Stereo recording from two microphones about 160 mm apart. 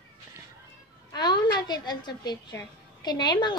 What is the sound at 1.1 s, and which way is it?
A woman's voice, 25° left (ahead or behind).